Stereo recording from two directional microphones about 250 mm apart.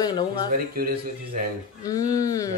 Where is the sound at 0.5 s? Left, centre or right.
Right.